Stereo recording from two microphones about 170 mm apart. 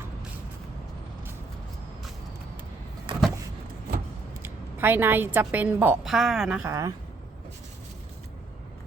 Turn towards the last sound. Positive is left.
turn(degrees=-20)  # may be behind; listen again after turning